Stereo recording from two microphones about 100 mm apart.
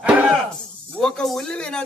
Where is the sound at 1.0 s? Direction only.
5° left (ahead or behind).